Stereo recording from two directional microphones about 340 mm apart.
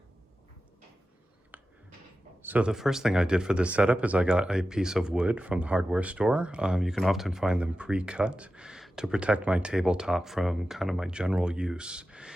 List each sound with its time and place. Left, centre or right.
2.4 s speech: centre